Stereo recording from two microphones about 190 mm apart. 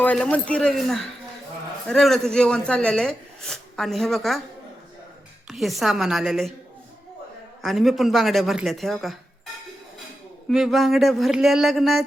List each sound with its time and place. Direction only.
0.0 s speech: 5° left (ahead or behind)
5.5 s speech: centre (ahead or behind)
7.6 s speech: centre (ahead or behind)
10.5 s speech: centre (ahead or behind)